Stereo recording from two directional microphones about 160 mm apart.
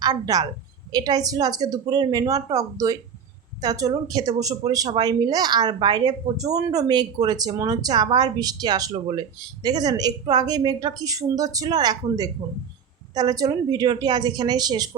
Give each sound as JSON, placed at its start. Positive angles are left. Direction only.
{"t": 0.0, "sound": "a woman's voice", "side_deg": -25}